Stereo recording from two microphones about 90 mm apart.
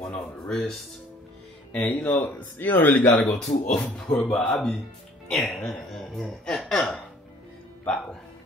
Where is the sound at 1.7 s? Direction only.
15° left (ahead or behind).